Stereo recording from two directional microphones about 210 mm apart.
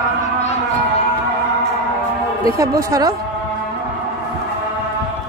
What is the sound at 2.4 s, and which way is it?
Speech, 15° right (ahead or behind).